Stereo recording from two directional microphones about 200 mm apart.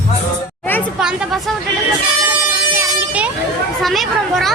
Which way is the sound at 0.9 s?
5° right (ahead or behind).